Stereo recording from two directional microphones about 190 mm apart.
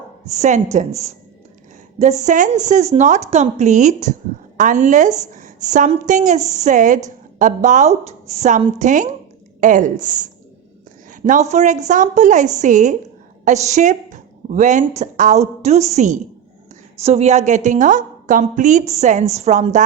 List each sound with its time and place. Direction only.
0.3 s a woman's voice: 40° right (ahead or behind)